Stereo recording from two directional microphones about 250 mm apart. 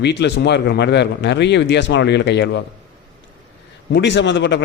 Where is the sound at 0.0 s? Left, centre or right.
Left.